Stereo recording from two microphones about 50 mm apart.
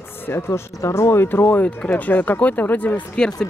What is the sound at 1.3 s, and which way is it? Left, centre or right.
Speech, left.